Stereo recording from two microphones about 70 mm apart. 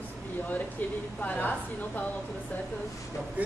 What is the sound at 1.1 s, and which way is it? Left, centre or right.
Speech, left.